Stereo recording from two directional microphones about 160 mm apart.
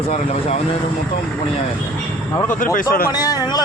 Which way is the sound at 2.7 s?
65° left (ahead or behind).